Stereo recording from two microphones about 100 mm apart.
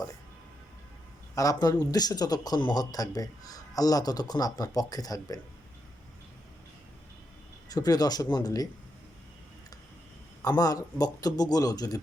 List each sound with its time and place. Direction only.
1.4 s a man's voice: 40° left (ahead or behind)
7.7 s a man's voice: 40° left (ahead or behind)
10.6 s a man's voice: 40° left (ahead or behind)